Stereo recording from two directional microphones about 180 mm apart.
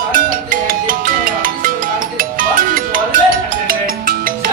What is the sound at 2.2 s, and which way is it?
Music, 50° right (ahead or behind).